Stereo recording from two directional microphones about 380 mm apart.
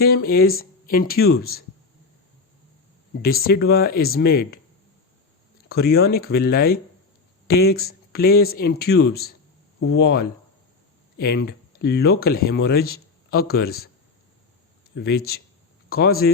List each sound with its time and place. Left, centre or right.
0.3 s speech: left
3.2 s speech: left
5.6 s speech: left
14.9 s speech: left